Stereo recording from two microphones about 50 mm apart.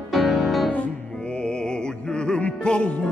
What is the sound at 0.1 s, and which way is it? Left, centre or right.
Music, centre.